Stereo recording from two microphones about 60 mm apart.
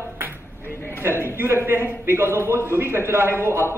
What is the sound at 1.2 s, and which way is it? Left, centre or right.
A man's voice, right.